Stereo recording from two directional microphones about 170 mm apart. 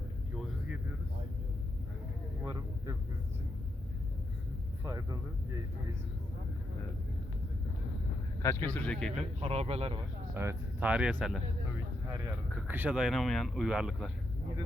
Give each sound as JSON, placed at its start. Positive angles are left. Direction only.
{"t": 4.8, "sound": "speech", "side_deg": -20}
{"t": 8.4, "sound": "speech", "side_deg": 15}
{"t": 9.4, "sound": "speech", "side_deg": -35}
{"t": 10.3, "sound": "speech", "side_deg": -15}
{"t": 12.5, "sound": "speech", "side_deg": -10}